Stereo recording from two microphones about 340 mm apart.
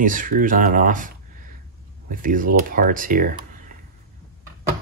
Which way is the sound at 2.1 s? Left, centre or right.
Right.